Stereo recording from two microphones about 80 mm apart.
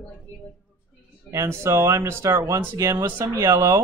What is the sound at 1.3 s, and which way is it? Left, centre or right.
Speech, right.